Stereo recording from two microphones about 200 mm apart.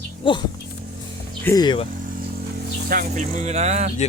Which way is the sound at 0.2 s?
25° left (ahead or behind).